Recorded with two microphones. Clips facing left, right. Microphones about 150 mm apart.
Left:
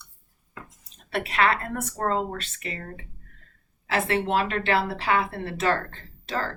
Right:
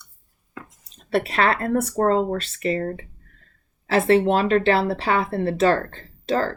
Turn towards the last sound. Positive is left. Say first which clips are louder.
# right 8 dB
turn(degrees=-35)  # may be behind; listen again after turning